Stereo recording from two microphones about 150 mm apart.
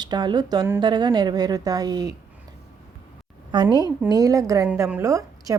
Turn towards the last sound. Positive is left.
turn(degrees=-20)  # may be behind; listen again after turning